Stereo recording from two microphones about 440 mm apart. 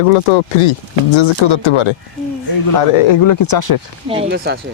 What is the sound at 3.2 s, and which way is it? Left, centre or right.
Speech, left.